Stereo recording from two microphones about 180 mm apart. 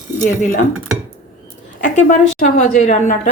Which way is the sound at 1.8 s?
45° left (ahead or behind).